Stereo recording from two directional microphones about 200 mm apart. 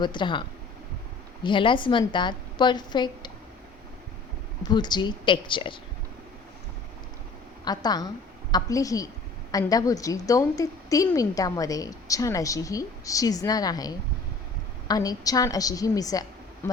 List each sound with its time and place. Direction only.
0.0 s a woman's voice: 25° left (ahead or behind)
1.5 s a woman's voice: 25° left (ahead or behind)
4.6 s a woman's voice: 20° left (ahead or behind)
7.6 s a woman's voice: 20° left (ahead or behind)